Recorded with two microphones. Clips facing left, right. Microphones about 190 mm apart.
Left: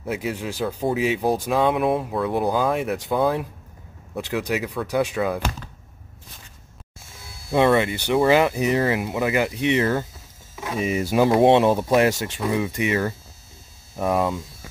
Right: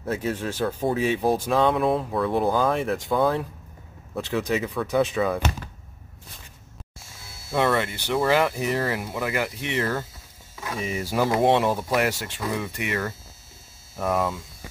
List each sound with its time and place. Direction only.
0.0 s speech: 10° left (ahead or behind)
5.1 s speech: centre (ahead or behind)
7.5 s speech: 20° left (ahead or behind)